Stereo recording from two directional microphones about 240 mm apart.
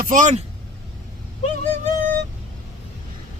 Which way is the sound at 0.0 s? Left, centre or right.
Right.